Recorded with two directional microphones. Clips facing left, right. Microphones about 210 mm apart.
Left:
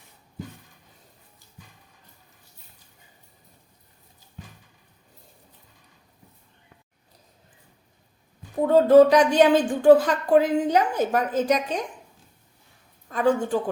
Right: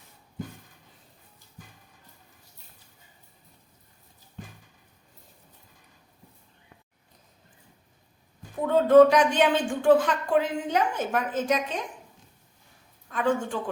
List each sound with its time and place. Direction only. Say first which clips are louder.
8.6 s speech: left 2 dB; 35° left (ahead or behind)
13.1 s a woman's voice: left 4 dB; 40° left (ahead or behind)